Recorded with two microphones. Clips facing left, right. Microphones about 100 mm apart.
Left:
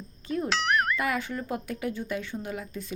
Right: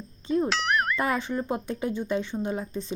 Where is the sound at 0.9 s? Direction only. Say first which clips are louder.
Right 3 dB; 30° right (ahead or behind).